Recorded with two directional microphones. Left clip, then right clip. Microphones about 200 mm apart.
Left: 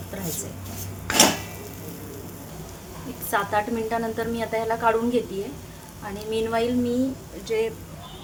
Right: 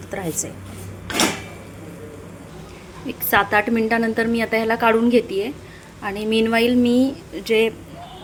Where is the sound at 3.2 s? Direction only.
30° right (ahead or behind).